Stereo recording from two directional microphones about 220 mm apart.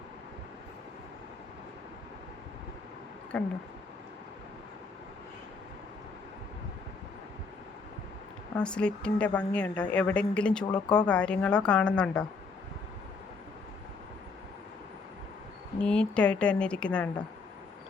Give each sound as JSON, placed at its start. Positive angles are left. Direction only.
{"t": 3.3, "sound": "a woman's voice", "side_deg": 5}
{"t": 8.5, "sound": "a woman's voice", "side_deg": 5}
{"t": 10.6, "sound": "speech", "side_deg": 20}
{"t": 10.9, "sound": "a woman's voice", "side_deg": 5}
{"t": 15.8, "sound": "a woman's voice", "side_deg": 5}